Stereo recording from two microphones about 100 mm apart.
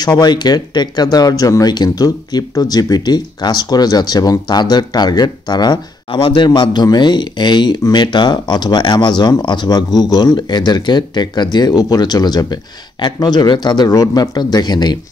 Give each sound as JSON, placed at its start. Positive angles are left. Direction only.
{"t": 0.0, "sound": "speech", "side_deg": 45}